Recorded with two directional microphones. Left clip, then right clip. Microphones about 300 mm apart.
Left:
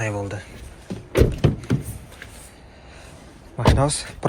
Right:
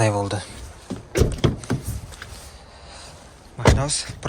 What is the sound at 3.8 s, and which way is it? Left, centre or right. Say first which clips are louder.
Speech: left 4 dB; centre.